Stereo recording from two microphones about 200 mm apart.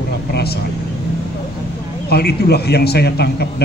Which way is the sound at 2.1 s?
55° left (ahead or behind).